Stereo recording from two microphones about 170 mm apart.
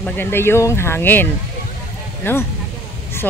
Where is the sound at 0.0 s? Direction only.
10° left (ahead or behind).